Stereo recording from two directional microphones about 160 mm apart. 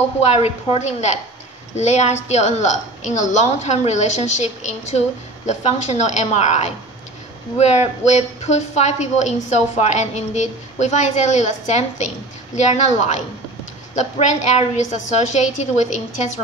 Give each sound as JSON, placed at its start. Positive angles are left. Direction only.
{"t": 0.2, "sound": "a woman's voice", "side_deg": 40}